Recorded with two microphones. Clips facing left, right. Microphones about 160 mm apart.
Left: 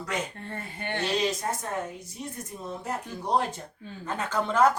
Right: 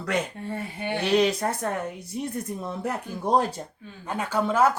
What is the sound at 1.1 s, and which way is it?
Speech, 65° right (ahead or behind).